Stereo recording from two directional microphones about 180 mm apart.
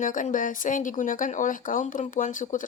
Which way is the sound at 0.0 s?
45° left (ahead or behind).